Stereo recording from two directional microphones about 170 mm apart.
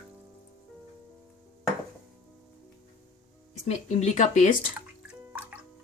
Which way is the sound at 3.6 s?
45° left (ahead or behind).